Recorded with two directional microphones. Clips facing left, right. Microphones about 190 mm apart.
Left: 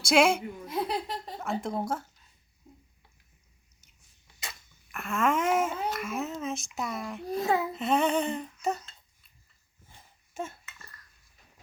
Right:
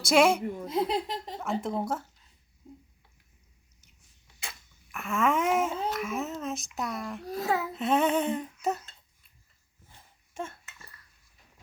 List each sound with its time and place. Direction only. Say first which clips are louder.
0.0 s a child's voice: right 1 dB; centre (ahead or behind)
0.4 s speech: right 3 dB; 25° right (ahead or behind)
1.4 s a child's voice: right 1 dB; centre (ahead or behind)
4.4 s a sound: left 1 dB; centre (ahead or behind)
5.9 s a child's voice: right 1 dB; centre (ahead or behind)
9.9 s a sound: left 1 dB; 5° left (ahead or behind)